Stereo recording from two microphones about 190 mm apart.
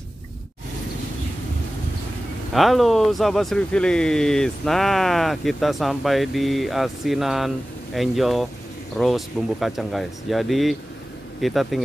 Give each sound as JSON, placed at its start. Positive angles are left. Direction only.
{"t": 2.5, "sound": "speech", "side_deg": 0}